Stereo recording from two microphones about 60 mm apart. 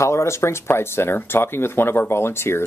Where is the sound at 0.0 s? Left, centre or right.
Left.